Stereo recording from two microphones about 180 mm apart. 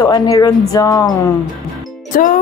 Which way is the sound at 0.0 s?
20° left (ahead or behind).